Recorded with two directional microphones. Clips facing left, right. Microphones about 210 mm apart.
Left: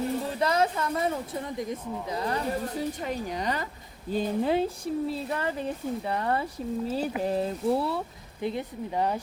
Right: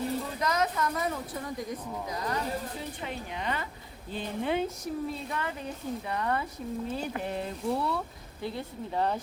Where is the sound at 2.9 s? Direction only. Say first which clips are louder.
Left 6 dB; 40° left (ahead or behind).